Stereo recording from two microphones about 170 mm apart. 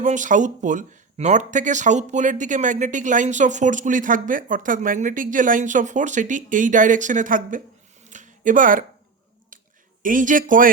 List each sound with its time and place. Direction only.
0.0 s speech: 45° right (ahead or behind)
8.0 s a sound: 45° right (ahead or behind)
10.0 s speech: 50° right (ahead or behind)